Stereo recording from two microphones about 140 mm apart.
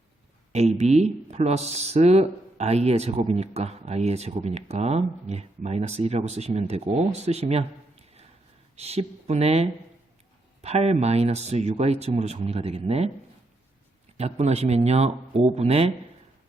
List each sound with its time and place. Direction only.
0.5 s speech: 50° right (ahead or behind)
14.2 s speech: 50° right (ahead or behind)